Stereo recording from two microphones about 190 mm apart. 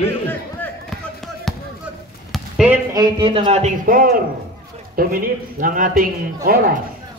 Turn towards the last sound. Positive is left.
turn(degrees=-50)  # may be behind; listen again after turning